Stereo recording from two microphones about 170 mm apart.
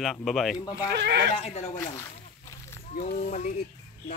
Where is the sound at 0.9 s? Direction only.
80° right.